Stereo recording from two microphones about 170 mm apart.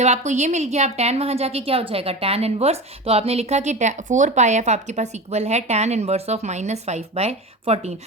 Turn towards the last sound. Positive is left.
turn(degrees=-40)  # may be behind; listen again after turning